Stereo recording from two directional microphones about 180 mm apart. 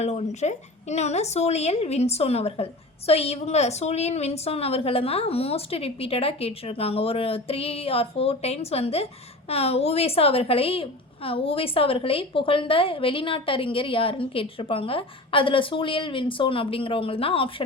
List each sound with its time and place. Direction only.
0.0 s a woman's voice: 40° left (ahead or behind)